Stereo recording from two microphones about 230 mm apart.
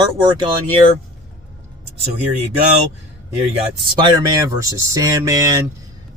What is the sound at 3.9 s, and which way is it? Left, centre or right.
Speech, centre.